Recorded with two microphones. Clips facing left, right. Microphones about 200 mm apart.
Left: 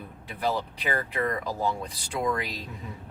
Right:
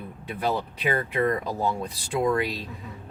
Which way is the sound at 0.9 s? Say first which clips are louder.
Right 5 dB; 25° right (ahead or behind).